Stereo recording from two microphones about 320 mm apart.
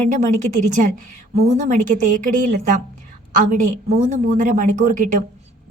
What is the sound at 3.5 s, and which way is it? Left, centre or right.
A woman's voice, right.